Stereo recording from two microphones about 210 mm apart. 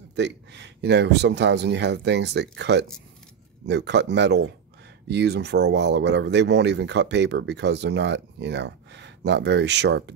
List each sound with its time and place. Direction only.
0.1 s speech: 55° right (ahead or behind)